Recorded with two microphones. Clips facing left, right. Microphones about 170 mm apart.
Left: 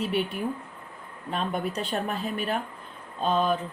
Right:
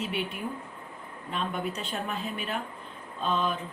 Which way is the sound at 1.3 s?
40° left (ahead or behind).